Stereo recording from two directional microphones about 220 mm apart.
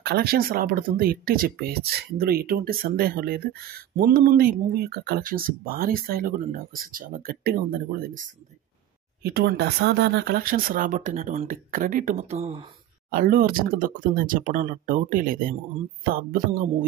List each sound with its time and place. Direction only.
0.0 s speech: 45° right (ahead or behind); by 12.6 s 25° right (ahead or behind)
13.1 s speech: 40° right (ahead or behind)